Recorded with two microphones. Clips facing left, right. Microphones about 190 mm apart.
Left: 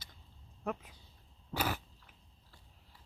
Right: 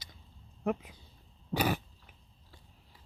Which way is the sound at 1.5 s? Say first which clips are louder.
Right 6 dB; 20° right (ahead or behind).